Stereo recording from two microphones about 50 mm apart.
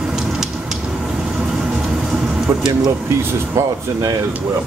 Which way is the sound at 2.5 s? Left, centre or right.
Right.